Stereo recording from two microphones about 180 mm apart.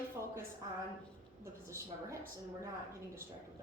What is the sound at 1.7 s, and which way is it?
Speech, 15° right (ahead or behind).